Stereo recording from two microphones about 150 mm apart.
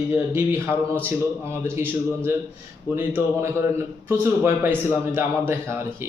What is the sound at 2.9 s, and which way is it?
A man's voice, 15° right (ahead or behind).